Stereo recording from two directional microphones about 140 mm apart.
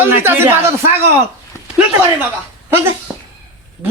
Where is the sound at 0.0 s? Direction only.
15° right (ahead or behind).